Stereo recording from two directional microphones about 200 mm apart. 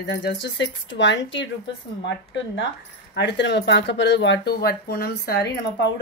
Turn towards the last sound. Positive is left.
turn(degrees=55)  # may be behind; listen again after turning